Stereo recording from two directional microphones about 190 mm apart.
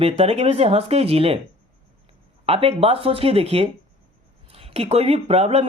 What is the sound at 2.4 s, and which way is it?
Speech, 30° right (ahead or behind).